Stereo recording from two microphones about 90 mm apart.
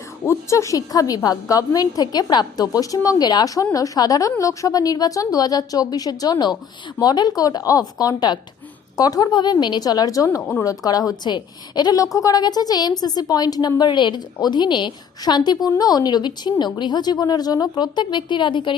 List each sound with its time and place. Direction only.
0.3 s a woman's voice: 35° left (ahead or behind); by 18.8 s 60° left (ahead or behind)